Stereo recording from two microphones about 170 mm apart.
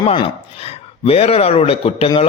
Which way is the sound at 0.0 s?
30° left (ahead or behind).